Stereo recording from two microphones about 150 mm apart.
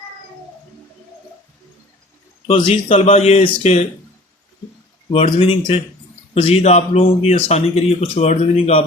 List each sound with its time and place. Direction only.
2.5 s speech: 45° left (ahead or behind)
5.1 s speech: 45° left (ahead or behind)